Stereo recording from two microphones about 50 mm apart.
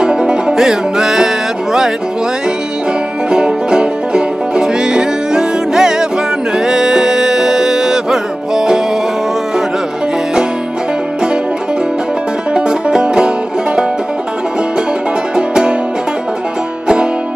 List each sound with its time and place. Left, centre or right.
0.0 s music: centre
3.3 s music: centre
12.5 s music: centre
15.3 s music: centre
16.8 s music: centre